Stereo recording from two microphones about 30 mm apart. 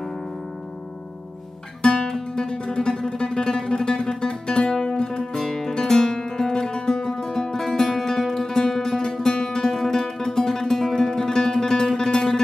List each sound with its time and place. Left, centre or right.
1.8 s music: centre